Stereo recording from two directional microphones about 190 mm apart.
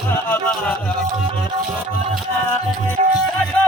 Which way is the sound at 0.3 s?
5° left (ahead or behind).